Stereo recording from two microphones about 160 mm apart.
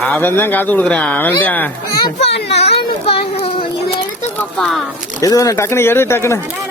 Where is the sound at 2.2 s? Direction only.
90° left.